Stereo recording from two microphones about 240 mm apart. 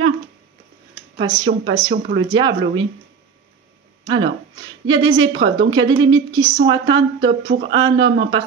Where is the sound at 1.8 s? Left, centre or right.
Right.